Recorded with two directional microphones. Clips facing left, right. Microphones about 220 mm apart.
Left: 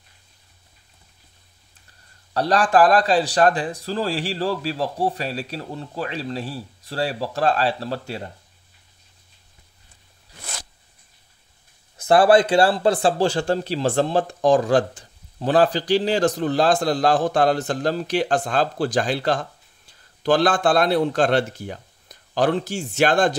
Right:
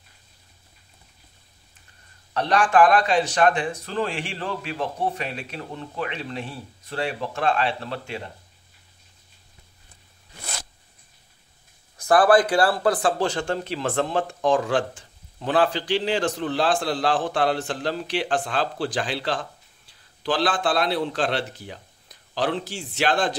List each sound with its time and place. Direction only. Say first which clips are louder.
2.3 s a man's voice: left 2 dB; 35° left (ahead or behind)
12.0 s a man's voice: left 2 dB; 25° left (ahead or behind); by 23.3 s 45° left (ahead or behind)